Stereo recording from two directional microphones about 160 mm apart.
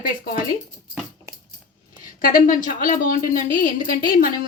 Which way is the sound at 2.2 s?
60° left (ahead or behind).